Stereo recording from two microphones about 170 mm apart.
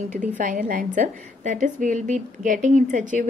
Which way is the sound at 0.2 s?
50° right (ahead or behind).